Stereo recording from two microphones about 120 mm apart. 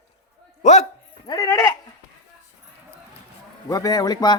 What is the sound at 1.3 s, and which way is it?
Speech, 30° left (ahead or behind).